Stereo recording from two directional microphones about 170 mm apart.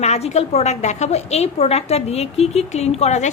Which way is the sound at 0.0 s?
40° left (ahead or behind).